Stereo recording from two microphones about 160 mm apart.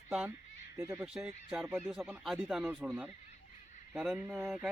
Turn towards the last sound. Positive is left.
turn(degrees=-5)  # may be behind; listen again after turning